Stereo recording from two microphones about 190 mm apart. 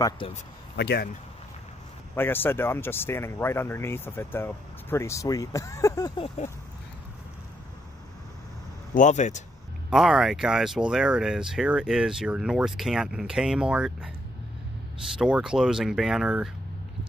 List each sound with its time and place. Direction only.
0.7 s speech: 60° left (ahead or behind)
2.1 s speech: 10° left (ahead or behind)
8.9 s speech: 40° left (ahead or behind)
9.8 s speech: 5° right (ahead or behind)
15.1 s speech: 5° right (ahead or behind)